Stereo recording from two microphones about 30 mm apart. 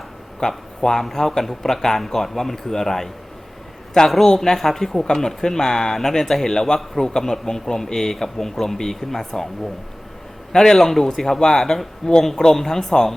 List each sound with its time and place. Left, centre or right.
0.3 s speech: centre
4.0 s a man's voice: left
4.4 s speech: centre
6.7 s speech: centre
10.5 s a man's voice: left
10.8 s speech: centre